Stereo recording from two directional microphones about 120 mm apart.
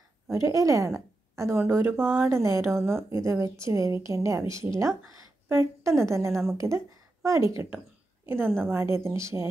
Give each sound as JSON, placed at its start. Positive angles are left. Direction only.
{"t": 0.3, "sound": "a woman's voice", "side_deg": -25}
{"t": 8.6, "sound": "a woman's voice", "side_deg": -20}